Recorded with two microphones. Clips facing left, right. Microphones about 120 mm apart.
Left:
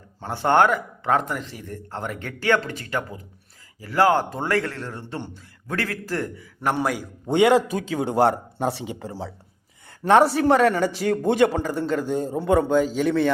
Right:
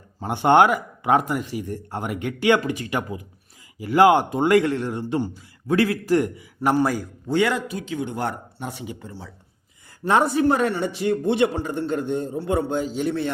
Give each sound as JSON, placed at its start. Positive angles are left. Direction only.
{"t": 0.2, "sound": "a man's voice", "side_deg": -15}
{"t": 7.3, "sound": "a man's voice", "side_deg": 20}
{"t": 8.1, "sound": "a man's voice", "side_deg": 90}
{"t": 10.0, "sound": "a man's voice", "side_deg": 70}